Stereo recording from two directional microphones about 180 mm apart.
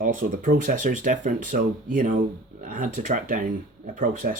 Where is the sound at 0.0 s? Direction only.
45° right (ahead or behind).